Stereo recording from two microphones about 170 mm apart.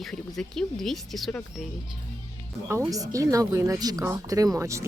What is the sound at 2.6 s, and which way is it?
Speech, 15° right (ahead or behind).